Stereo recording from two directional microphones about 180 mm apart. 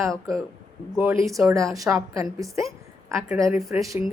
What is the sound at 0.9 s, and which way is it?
A woman's voice, 15° right (ahead or behind).